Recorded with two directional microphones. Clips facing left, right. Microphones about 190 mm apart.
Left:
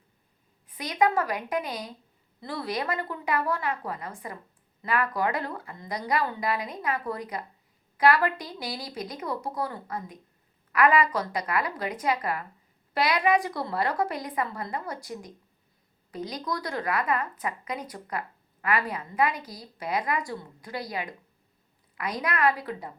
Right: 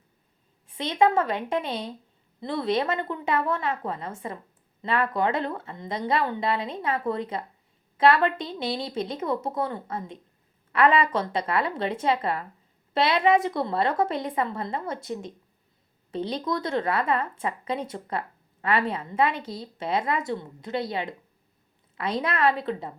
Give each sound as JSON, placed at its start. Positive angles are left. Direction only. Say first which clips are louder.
{"t": 0.7, "sound": "a woman's voice", "louder": "right 3 dB", "side_deg": -25}